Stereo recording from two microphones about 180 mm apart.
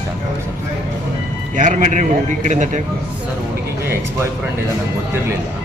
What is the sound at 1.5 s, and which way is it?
A man's voice, 45° right (ahead or behind).